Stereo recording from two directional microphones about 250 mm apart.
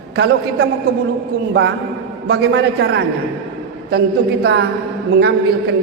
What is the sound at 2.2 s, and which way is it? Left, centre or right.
A man's voice, right.